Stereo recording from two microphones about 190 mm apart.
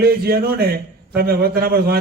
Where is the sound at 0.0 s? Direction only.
55° right (ahead or behind).